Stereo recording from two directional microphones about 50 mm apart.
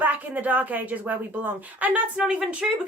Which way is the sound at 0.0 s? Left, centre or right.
Right.